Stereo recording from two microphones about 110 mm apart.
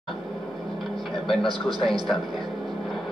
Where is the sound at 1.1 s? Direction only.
Centre (ahead or behind).